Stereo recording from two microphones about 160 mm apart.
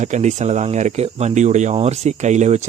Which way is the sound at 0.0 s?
45° right (ahead or behind).